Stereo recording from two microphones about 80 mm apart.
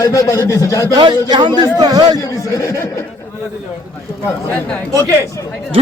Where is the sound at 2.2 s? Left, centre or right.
Left.